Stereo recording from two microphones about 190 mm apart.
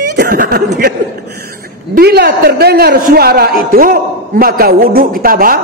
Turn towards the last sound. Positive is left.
turn(degrees=-50)  # may be behind; listen again after turning